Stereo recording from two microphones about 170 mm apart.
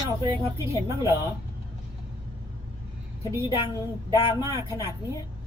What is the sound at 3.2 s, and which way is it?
Speech, 20° left (ahead or behind).